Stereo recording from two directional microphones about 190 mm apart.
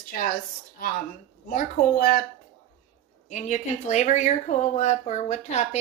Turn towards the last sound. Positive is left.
turn(degrees=35)  # may be behind; listen again after turning